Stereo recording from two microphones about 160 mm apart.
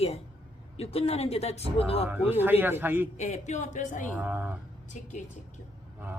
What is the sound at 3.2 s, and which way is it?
Speech, 45° left (ahead or behind).